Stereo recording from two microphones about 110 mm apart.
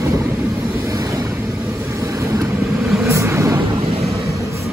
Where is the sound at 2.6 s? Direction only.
Centre (ahead or behind).